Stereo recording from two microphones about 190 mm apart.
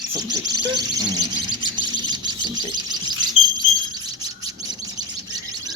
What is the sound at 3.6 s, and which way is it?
Chirp, 20° right (ahead or behind).